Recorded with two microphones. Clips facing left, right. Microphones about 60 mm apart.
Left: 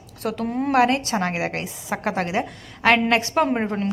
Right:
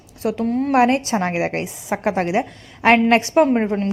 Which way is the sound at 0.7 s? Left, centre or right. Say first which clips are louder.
Right 2 dB; right.